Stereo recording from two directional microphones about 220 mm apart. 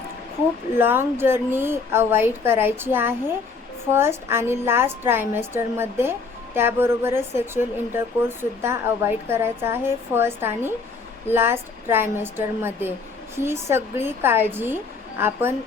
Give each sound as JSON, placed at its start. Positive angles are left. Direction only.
{"t": 0.8, "sound": "a woman's voice", "side_deg": -10}